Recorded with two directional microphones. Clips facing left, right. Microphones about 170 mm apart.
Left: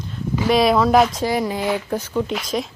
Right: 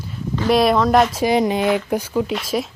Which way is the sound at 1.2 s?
20° right (ahead or behind).